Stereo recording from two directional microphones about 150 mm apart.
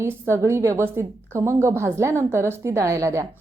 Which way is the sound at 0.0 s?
20° right (ahead or behind).